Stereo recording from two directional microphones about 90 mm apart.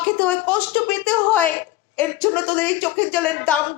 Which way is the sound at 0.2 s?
15° left (ahead or behind).